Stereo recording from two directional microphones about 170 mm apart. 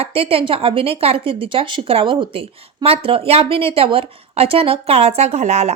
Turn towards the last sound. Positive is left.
turn(degrees=-40)  # may be behind; listen again after turning